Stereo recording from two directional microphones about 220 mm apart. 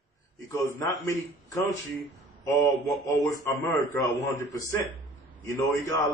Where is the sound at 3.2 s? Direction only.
15° left (ahead or behind).